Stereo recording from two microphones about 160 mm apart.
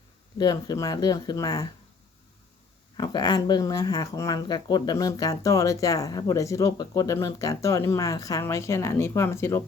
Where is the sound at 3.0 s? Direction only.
25° left (ahead or behind).